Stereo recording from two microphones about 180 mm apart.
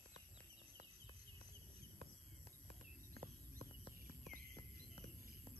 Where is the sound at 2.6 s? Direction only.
50° right (ahead or behind).